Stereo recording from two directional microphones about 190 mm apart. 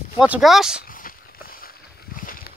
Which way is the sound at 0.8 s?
45° left (ahead or behind).